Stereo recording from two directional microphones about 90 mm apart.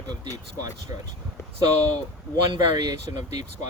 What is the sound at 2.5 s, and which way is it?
Speech, 55° right (ahead or behind).